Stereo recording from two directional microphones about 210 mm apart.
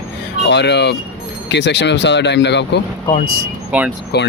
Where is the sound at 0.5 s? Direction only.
55° left (ahead or behind).